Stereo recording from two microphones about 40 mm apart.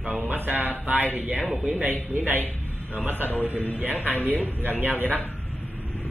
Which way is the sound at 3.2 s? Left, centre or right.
Left.